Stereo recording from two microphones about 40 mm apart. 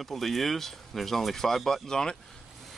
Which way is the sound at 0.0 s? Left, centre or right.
Centre.